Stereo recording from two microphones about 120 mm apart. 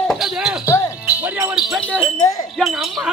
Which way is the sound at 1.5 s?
5° right (ahead or behind).